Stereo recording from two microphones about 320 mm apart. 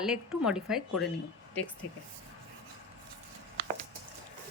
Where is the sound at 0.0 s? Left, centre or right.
Centre.